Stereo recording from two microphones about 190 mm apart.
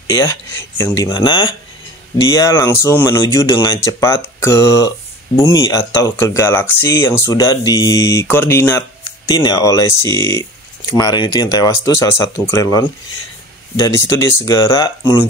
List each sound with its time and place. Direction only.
0.0 s speech: 15° left (ahead or behind)
1.0 s speech: 25° left (ahead or behind)